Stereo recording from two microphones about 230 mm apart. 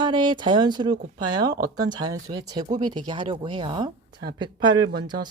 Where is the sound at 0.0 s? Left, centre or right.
Right.